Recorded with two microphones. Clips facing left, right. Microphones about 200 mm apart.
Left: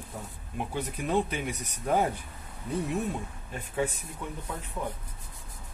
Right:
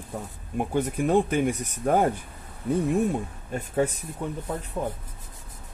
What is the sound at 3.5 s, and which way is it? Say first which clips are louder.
Speech: right 6 dB; 40° right (ahead or behind).